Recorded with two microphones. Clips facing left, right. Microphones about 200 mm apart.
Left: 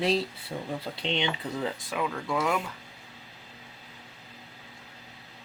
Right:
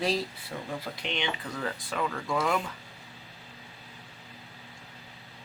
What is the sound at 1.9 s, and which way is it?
Speech, 5° left (ahead or behind).